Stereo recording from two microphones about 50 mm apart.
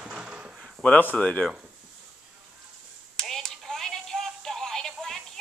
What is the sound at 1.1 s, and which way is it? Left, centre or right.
Speech, left.